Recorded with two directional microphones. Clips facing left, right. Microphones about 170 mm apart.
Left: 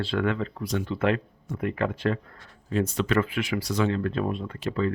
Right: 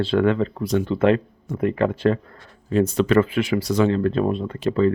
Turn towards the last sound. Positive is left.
turn(degrees=-30)  # may be behind; listen again after turning